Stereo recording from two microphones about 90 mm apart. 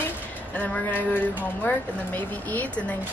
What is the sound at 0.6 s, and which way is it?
Speech, 20° left (ahead or behind).